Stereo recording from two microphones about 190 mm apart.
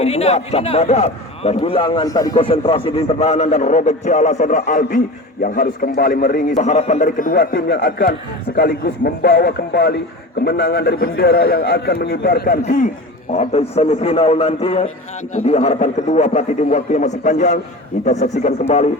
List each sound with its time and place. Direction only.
0.0 s a man's voice: 35° left (ahead or behind); by 6.4 s 50° left (ahead or behind)
6.6 s a man's voice: 40° left (ahead or behind); by 12.5 s 55° left (ahead or behind)
13.3 s a man's voice: 35° left (ahead or behind)